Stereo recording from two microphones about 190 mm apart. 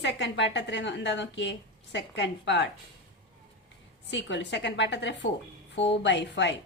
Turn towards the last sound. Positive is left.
turn(degrees=70)  # may be behind; listen again after turning